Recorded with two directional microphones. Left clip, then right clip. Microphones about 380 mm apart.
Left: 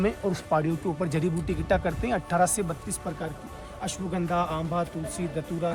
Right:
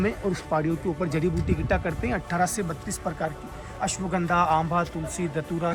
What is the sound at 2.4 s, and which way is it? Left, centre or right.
Speech, centre.